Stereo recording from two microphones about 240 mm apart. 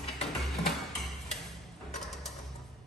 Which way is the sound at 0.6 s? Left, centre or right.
Centre.